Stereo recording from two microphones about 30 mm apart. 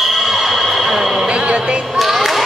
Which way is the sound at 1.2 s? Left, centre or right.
Right.